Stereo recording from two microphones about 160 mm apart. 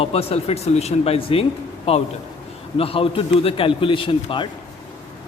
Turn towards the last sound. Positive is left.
turn(degrees=30)  # may be behind; listen again after turning